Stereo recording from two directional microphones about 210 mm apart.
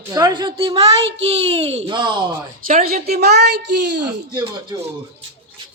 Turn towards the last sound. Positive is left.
turn(degrees=-20)  # may be behind; listen again after turning